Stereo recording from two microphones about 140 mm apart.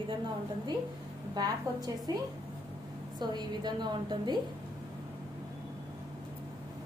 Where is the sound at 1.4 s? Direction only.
25° right (ahead or behind).